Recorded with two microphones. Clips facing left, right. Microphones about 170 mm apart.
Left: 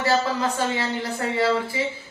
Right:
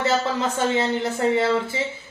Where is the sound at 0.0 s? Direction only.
20° right (ahead or behind).